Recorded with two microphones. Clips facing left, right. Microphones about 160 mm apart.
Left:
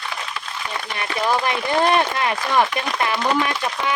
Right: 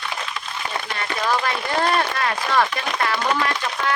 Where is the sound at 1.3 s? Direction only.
20° left (ahead or behind).